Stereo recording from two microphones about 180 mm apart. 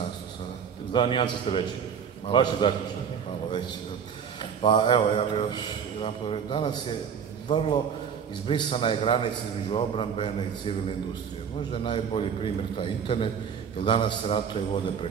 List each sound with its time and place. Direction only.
0.9 s a man's voice: 25° left (ahead or behind)
4.4 s a man's voice: 30° left (ahead or behind)
11.7 s a man's voice: 30° left (ahead or behind)